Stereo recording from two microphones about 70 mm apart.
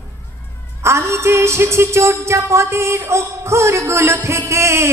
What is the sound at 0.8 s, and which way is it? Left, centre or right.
Music, right.